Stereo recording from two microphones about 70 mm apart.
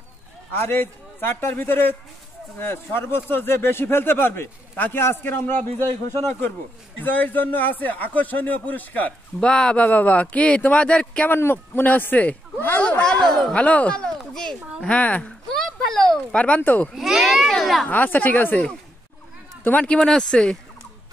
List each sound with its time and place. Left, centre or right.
0.5 s speech: left
7.0 s speech: left
11.2 s speech: left
13.0 s speech: centre
15.5 s a sound: centre
16.3 s speech: centre
16.9 s a child's voice: centre
17.8 s speech: left; by 20.5 s centre